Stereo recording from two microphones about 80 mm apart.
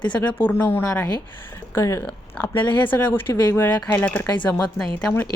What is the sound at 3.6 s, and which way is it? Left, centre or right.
Speech, left.